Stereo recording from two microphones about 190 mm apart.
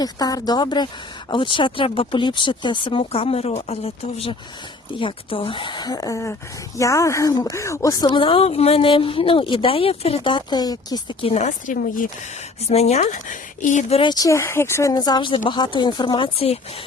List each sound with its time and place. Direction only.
0.0 s speech: 20° left (ahead or behind); by 14.0 s 40° left (ahead or behind)
14.0 s speech: 20° left (ahead or behind)